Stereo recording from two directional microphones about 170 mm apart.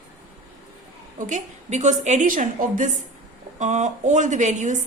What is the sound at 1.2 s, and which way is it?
A woman's voice, 45° right (ahead or behind).